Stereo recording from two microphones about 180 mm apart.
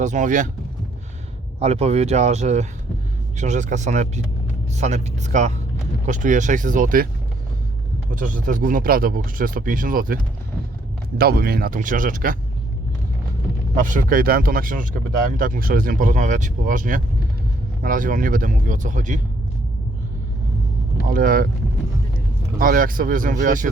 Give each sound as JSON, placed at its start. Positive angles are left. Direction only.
{"t": 0.0, "sound": "speech", "side_deg": -45}
{"t": 1.5, "sound": "speech", "side_deg": -35}
{"t": 8.1, "sound": "speech", "side_deg": -45}
{"t": 11.2, "sound": "speech", "side_deg": -60}
{"t": 13.7, "sound": "speech", "side_deg": -45}
{"t": 21.1, "sound": "speech", "side_deg": -50}
{"t": 22.5, "sound": "speech", "side_deg": -50}